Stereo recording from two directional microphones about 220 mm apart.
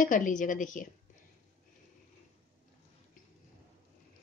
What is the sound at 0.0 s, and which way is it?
Speech, 35° left (ahead or behind).